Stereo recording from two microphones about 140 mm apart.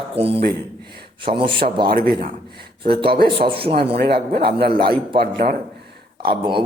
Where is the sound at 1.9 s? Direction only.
90° right.